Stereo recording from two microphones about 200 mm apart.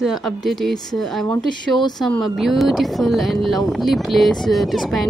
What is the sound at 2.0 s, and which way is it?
Speech, centre (ahead or behind).